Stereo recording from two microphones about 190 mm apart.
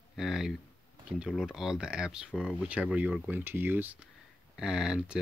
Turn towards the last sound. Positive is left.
turn(degrees=-5)  # may be behind; listen again after turning